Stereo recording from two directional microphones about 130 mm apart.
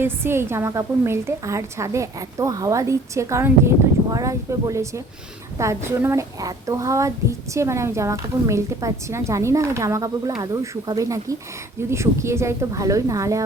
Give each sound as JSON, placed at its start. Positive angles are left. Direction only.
{"t": 0.0, "sound": "speech", "side_deg": -20}